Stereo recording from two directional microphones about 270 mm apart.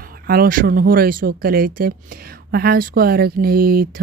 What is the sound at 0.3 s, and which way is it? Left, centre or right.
Speech, right.